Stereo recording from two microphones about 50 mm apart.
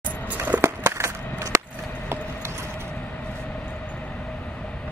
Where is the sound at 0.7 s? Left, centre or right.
Right.